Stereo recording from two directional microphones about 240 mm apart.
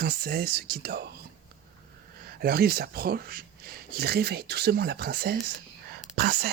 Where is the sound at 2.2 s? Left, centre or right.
Right.